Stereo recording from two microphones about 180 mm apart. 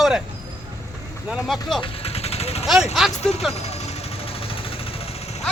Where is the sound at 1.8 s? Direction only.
35° left (ahead or behind).